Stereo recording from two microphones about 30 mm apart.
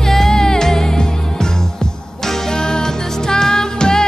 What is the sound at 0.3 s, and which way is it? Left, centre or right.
Music, left.